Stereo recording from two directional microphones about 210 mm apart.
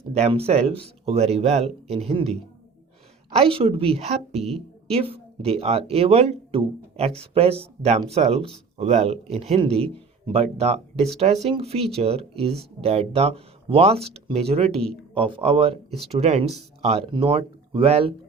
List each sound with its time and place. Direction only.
0.1 s speech: 30° right (ahead or behind)
3.3 s speech: 25° right (ahead or behind)
14.7 s speech: 5° left (ahead or behind)
15.1 s speech: 25° right (ahead or behind)